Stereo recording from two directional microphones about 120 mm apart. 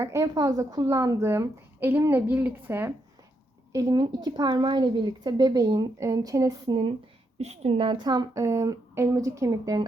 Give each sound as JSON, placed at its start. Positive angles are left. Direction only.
{"t": 0.0, "sound": "a woman's voice", "side_deg": -25}
{"t": 3.7, "sound": "a woman's voice", "side_deg": -30}
{"t": 7.3, "sound": "a woman's voice", "side_deg": -60}